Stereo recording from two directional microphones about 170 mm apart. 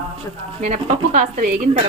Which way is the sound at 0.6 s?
45° right (ahead or behind).